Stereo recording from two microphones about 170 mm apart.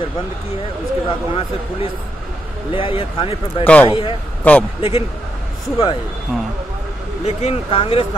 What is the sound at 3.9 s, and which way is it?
Speech, 30° left (ahead or behind).